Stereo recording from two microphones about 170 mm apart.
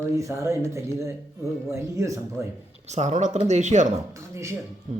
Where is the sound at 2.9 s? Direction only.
40° right (ahead or behind).